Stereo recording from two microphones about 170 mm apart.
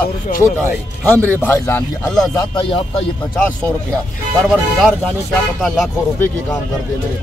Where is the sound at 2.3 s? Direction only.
30° left (ahead or behind).